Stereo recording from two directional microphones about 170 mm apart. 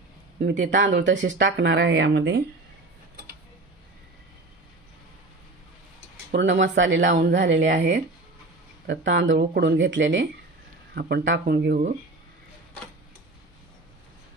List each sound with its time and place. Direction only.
0.7 s speech: 90° right
6.3 s speech: 90° right
7.2 s speech: 80° right
8.8 s speech: 85° right
11.0 s speech: 70° right (ahead or behind)